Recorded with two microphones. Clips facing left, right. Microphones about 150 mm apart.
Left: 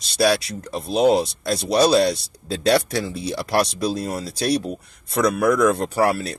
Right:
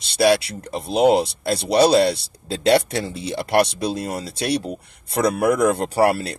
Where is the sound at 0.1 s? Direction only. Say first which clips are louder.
Right 2 dB; 30° right (ahead or behind).